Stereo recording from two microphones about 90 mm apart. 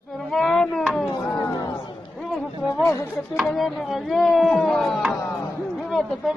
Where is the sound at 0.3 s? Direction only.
5° left (ahead or behind).